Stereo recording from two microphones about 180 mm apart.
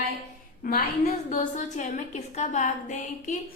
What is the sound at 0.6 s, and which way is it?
A woman's voice, 50° left (ahead or behind).